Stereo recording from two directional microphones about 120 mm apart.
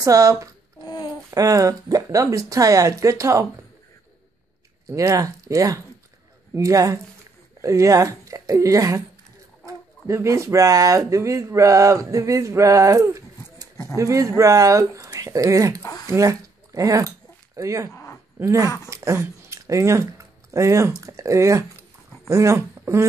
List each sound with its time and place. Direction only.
0.0 s speech: 30° right (ahead or behind)
0.8 s a sound: 35° left (ahead or behind)
1.3 s speech: 30° right (ahead or behind)
4.8 s speech: 25° right (ahead or behind)
15.8 s speech: 30° left (ahead or behind)
16.1 s speech: 25° right (ahead or behind)